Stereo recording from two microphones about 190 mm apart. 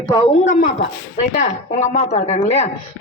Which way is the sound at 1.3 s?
40° left (ahead or behind).